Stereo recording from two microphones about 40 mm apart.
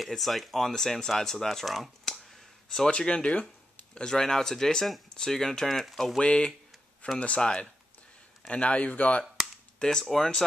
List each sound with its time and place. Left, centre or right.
0.0 s speech: centre
2.1 s a sound: centre
3.0 s speech: left
6.1 s speech: left
9.8 s speech: centre
10.0 s speech: centre